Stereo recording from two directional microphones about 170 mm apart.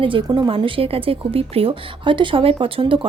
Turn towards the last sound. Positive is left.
turn(degrees=-30)  # may be behind; listen again after turning